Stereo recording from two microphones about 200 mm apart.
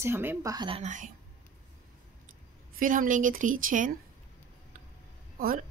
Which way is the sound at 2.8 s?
40° right (ahead or behind).